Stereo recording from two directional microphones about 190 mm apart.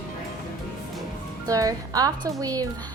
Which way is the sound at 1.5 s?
20° right (ahead or behind).